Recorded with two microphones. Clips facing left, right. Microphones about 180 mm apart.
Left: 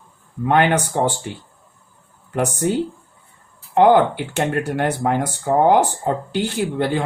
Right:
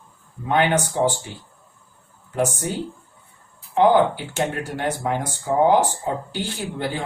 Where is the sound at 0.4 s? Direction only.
60° left (ahead or behind).